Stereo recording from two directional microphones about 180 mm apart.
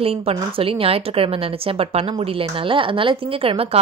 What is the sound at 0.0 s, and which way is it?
A woman's voice, 35° right (ahead or behind).